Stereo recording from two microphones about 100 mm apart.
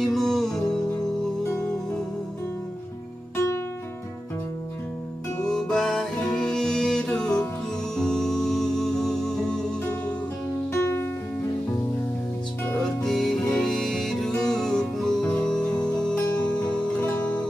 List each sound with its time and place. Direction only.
0.0 s music: 5° left (ahead or behind)
3.3 s music: 25° left (ahead or behind)
5.4 s music: 5° left (ahead or behind)
10.7 s music: 25° left (ahead or behind)
13.0 s music: 5° left (ahead or behind)